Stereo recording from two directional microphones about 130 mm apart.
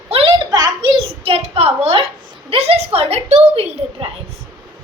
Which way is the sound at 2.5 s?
50° right (ahead or behind).